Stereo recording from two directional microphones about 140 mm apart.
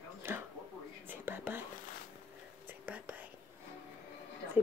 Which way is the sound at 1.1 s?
15° right (ahead or behind).